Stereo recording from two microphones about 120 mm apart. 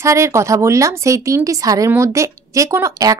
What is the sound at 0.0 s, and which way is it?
Speech, 25° right (ahead or behind).